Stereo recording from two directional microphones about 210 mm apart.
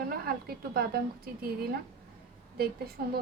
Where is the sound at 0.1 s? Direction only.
45° right (ahead or behind).